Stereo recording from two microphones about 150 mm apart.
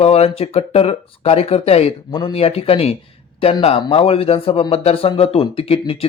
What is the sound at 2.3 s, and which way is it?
Speech, 40° left (ahead or behind).